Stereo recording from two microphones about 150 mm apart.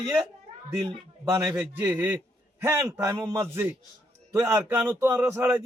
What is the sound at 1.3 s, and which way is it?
A man's voice, 15° right (ahead or behind).